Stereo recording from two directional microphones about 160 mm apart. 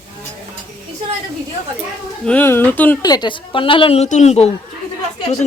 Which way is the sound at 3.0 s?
25° left (ahead or behind).